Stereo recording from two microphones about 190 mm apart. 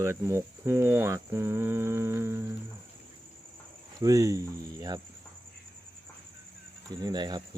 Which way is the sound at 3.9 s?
20° right (ahead or behind).